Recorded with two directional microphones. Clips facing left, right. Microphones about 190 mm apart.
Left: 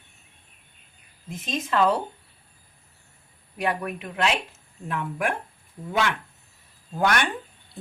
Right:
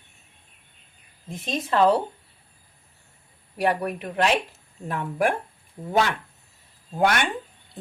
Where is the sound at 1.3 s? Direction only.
35° right (ahead or behind).